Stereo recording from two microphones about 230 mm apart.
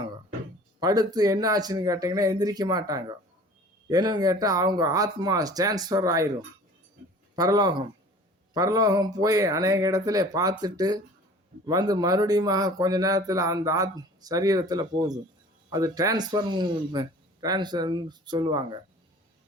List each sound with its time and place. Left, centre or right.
0.8 s speech: centre
7.3 s a man's voice: centre